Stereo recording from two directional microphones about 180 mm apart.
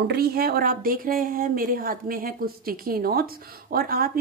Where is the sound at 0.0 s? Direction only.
60° right (ahead or behind).